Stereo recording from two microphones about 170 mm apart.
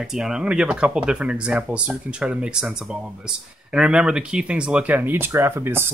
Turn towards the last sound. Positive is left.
turn(degrees=-15)  # may be behind; listen again after turning